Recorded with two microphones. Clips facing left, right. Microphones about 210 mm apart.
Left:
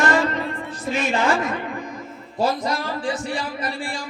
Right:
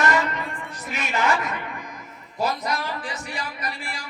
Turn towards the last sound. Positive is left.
turn(degrees=30)  # may be behind; listen again after turning